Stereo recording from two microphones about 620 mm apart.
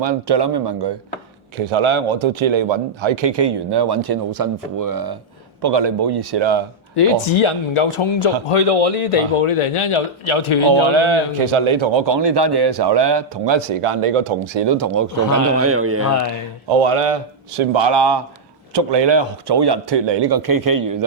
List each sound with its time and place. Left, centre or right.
0.0 s speech: right
1.6 s a man's voice: right
6.9 s speech: left
10.7 s a man's voice: right
15.5 s a man's voice: right
16.6 s a man's voice: right